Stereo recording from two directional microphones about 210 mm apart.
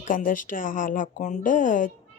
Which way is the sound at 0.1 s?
40° left (ahead or behind).